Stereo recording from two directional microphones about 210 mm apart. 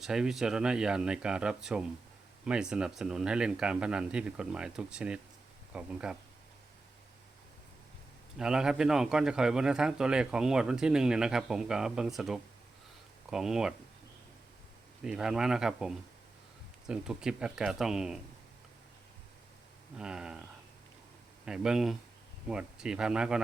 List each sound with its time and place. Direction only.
0.0 s a man's voice: centre (ahead or behind)
8.4 s a man's voice: 5° right (ahead or behind)
15.0 s a man's voice: 5° right (ahead or behind)
20.0 s a man's voice: 5° right (ahead or behind)
21.4 s a man's voice: 5° right (ahead or behind)